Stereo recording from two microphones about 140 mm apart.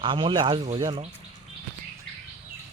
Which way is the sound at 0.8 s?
30° right (ahead or behind).